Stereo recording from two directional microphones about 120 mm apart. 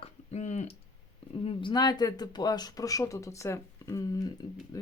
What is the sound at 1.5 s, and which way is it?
Speech, 40° left (ahead or behind).